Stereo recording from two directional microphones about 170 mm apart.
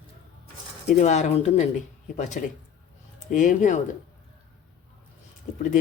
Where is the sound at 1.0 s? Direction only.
45° left (ahead or behind).